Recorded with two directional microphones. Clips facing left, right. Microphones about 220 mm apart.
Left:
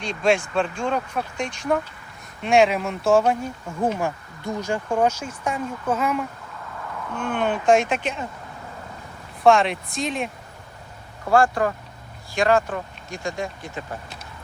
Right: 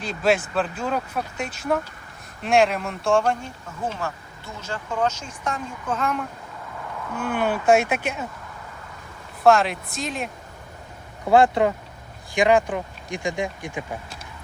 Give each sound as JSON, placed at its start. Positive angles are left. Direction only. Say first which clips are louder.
{"t": 0.0, "sound": "speech", "louder": "left 1 dB", "side_deg": -5}
{"t": 4.6, "sound": "speech", "louder": "left 3 dB", "side_deg": 15}
{"t": 7.1, "sound": "speech", "louder": "even", "side_deg": -5}
{"t": 9.4, "sound": "speech", "louder": "even", "side_deg": 0}
{"t": 11.3, "sound": "speech", "louder": "right 2 dB", "side_deg": -20}